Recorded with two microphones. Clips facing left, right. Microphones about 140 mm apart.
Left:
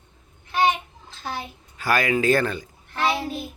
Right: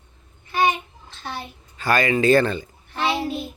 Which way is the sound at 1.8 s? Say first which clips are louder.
Right 2 dB; 5° left (ahead or behind).